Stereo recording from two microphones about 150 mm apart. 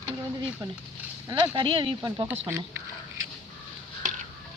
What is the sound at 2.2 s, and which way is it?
Speech, 15° right (ahead or behind).